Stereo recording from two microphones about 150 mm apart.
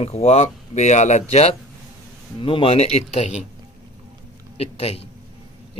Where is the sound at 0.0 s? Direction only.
45° left (ahead or behind).